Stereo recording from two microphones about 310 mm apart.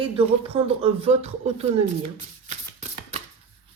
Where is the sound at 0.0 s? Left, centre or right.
Centre.